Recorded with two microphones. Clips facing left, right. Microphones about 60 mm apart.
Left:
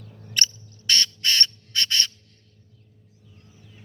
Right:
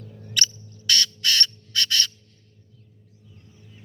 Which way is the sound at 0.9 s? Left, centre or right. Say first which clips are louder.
Even; left.